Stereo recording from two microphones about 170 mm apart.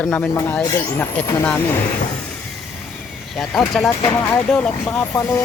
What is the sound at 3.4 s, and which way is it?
Speech, centre (ahead or behind).